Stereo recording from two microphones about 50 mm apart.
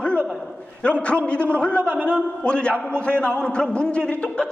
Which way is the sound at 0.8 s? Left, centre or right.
Left.